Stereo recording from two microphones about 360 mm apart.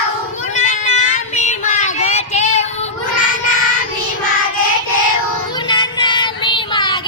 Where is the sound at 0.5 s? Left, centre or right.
Centre.